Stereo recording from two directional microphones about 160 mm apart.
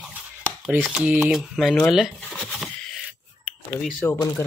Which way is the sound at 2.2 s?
5° left (ahead or behind).